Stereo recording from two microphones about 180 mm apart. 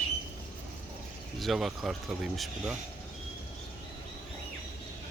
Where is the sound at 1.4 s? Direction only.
Centre (ahead or behind).